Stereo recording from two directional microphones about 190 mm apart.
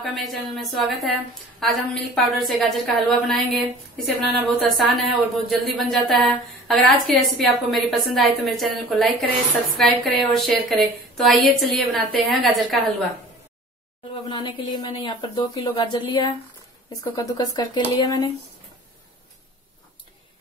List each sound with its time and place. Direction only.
0.0 s a woman's voice: centre (ahead or behind)
14.3 s a woman's voice: 25° left (ahead or behind)